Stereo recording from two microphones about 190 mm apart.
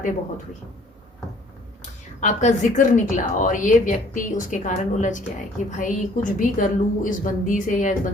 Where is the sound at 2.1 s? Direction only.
40° left (ahead or behind).